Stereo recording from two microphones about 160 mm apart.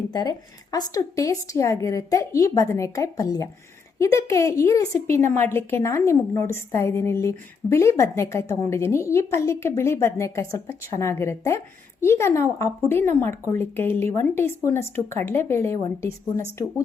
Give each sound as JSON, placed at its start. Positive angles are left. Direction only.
{"t": 0.1, "sound": "a woman's voice", "side_deg": 25}